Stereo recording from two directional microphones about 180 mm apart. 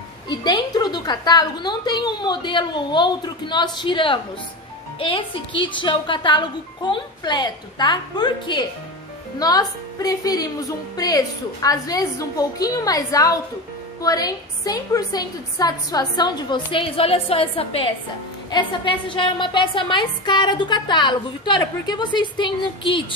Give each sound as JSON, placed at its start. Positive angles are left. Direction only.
{"t": 0.3, "sound": "a woman's voice", "side_deg": 25}